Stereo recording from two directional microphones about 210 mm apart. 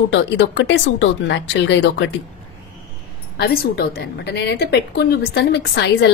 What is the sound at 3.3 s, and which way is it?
A woman's voice, 45° left (ahead or behind).